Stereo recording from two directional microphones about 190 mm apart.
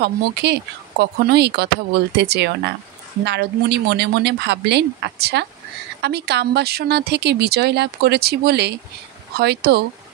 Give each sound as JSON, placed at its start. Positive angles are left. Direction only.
{"t": 0.0, "sound": "speech", "side_deg": -60}